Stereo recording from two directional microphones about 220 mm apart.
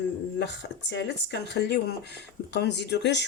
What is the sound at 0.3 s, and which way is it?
Speech, 50° left (ahead or behind).